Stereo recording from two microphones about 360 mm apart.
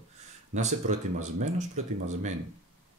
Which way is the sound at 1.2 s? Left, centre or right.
Centre.